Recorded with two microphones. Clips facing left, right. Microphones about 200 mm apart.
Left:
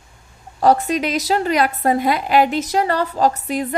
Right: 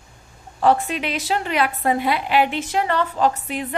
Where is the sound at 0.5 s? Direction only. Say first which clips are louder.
Left 3 dB; 40° left (ahead or behind).